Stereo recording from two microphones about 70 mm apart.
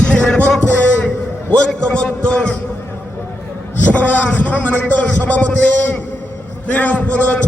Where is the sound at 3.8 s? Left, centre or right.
Left.